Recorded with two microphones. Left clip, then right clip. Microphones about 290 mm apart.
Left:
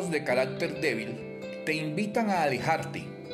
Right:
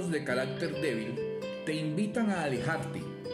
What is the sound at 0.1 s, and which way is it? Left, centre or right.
Speech, centre.